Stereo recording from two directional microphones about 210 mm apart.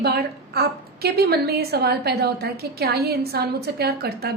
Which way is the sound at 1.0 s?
50° right (ahead or behind).